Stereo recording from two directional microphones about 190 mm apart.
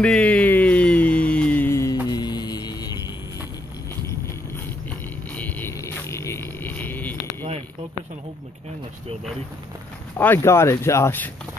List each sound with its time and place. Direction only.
0.0 s music: 5° left (ahead or behind)
2.0 s mantra: 20° left (ahead or behind)
5.3 s a sound: 10° left (ahead or behind)
10.1 s speech: 10° left (ahead or behind)